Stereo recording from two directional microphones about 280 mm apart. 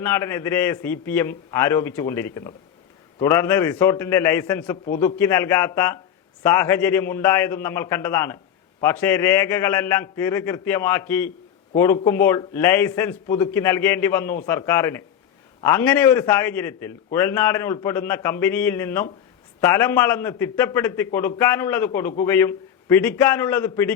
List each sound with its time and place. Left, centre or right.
0.0 s a man's voice: centre